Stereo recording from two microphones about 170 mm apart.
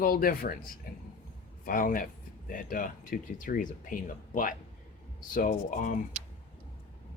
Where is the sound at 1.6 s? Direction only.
55° left (ahead or behind).